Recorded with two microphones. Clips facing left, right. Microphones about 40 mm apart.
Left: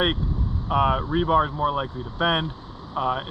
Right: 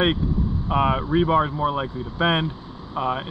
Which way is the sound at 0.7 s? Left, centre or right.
Right.